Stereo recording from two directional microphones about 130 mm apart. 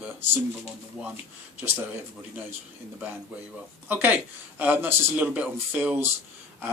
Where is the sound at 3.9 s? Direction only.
15° right (ahead or behind).